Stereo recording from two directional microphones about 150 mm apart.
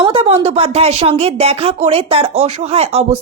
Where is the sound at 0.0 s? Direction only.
40° right (ahead or behind).